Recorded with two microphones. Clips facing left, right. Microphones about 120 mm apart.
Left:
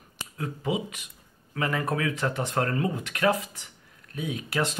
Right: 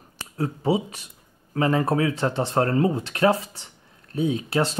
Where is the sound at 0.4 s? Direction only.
35° right (ahead or behind).